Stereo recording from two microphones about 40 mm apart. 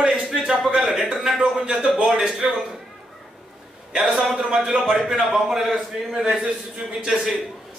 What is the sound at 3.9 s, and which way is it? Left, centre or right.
A man's voice, centre.